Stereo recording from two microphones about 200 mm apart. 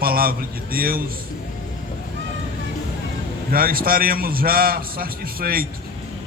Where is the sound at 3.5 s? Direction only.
45° right (ahead or behind).